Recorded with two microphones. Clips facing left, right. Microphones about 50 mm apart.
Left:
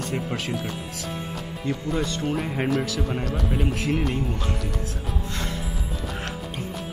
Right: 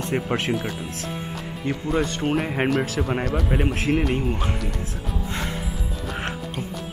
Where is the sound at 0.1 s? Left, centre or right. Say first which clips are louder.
Right 7 dB; right.